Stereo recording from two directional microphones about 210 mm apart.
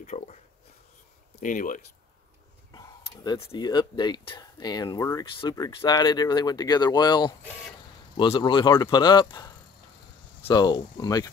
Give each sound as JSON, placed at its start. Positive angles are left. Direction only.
{"t": 0.0, "sound": "a sound", "side_deg": 35}
{"t": 1.3, "sound": "speech", "side_deg": 40}
{"t": 3.5, "sound": "speech", "side_deg": 20}